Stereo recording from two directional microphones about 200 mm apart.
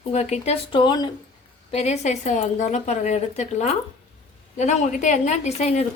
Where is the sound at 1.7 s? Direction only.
35° left (ahead or behind).